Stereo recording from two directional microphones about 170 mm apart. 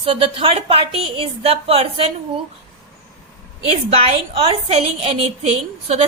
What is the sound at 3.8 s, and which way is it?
A woman's voice, 35° right (ahead or behind).